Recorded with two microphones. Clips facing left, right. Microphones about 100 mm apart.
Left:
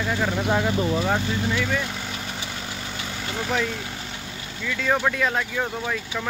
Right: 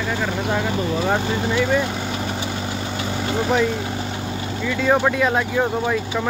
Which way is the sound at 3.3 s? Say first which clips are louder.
Right 6 dB; 20° right (ahead or behind).